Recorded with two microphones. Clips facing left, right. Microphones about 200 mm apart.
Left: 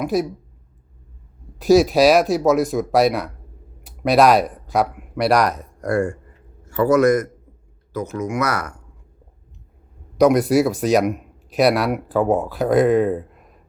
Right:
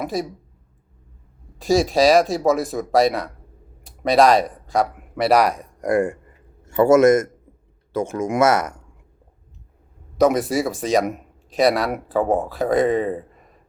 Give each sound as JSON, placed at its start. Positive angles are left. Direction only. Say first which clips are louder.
{"t": 0.0, "sound": "speech", "louder": "left 4 dB", "side_deg": 0}
{"t": 1.5, "sound": "speech", "louder": "left 4 dB", "side_deg": 0}
{"t": 10.2, "sound": "speech", "louder": "left 3 dB", "side_deg": 0}